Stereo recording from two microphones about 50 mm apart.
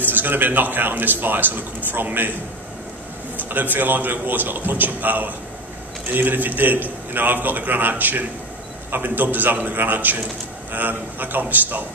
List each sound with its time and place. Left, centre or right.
0.0 s a man's voice: right
3.3 s a man's voice: right